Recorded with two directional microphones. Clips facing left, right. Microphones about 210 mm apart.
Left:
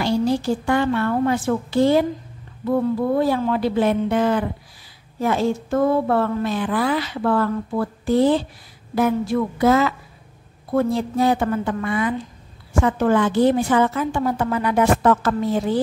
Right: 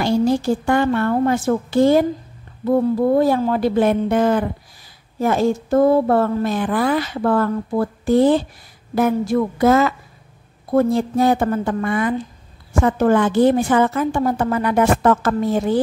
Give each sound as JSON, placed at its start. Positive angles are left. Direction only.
{"t": 0.0, "sound": "a woman's voice", "side_deg": -50}
{"t": 3.2, "sound": "a woman's voice", "side_deg": -40}